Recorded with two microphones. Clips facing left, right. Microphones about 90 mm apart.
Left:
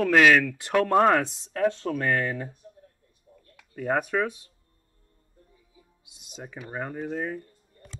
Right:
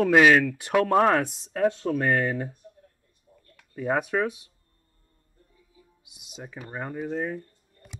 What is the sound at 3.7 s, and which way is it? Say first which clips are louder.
Speech: even; 5° right (ahead or behind).